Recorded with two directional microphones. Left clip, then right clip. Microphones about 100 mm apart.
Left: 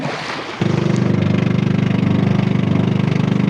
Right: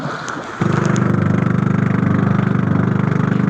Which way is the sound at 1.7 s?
90° right.